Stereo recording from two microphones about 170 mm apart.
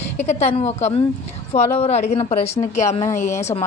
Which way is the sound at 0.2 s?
40° left (ahead or behind).